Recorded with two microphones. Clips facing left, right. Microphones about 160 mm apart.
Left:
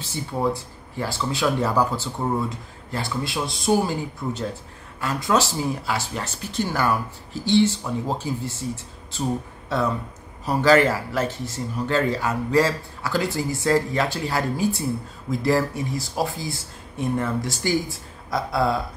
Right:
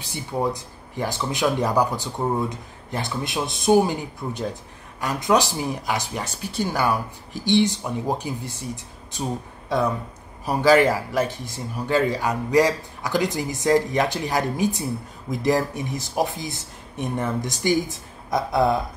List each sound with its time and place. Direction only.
0.0 s speech: 15° right (ahead or behind)